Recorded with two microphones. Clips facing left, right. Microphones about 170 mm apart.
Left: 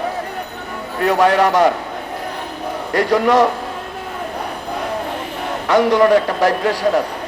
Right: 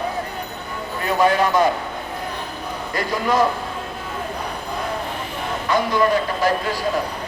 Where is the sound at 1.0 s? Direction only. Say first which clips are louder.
Left 4 dB; 75° left (ahead or behind).